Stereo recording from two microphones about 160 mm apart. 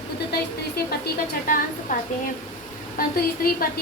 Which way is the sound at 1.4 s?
60° left (ahead or behind).